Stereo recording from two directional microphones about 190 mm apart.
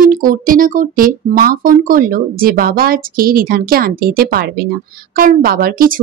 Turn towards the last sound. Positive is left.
turn(degrees=-50)  # may be behind; listen again after turning